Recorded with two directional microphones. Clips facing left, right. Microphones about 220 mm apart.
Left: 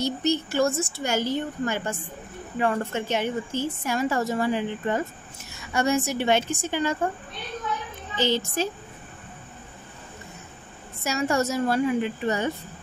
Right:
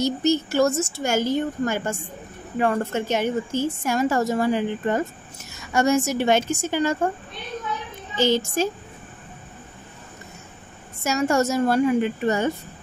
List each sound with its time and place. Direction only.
0.0 s a woman's voice: 45° right (ahead or behind)
8.2 s a woman's voice: 45° right (ahead or behind)
11.1 s a woman's voice: 45° right (ahead or behind)